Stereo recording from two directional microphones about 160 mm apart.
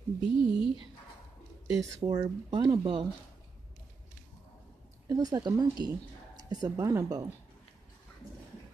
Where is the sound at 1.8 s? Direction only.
20° right (ahead or behind).